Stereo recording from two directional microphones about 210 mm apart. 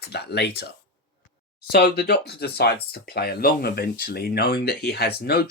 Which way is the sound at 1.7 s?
50° left (ahead or behind).